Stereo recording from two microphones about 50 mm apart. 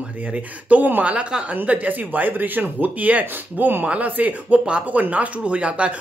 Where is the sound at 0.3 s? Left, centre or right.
Right.